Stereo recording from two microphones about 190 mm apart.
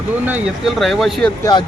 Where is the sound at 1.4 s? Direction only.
20° left (ahead or behind).